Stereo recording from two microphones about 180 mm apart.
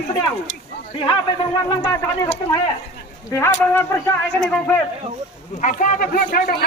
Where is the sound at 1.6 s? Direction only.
15° left (ahead or behind).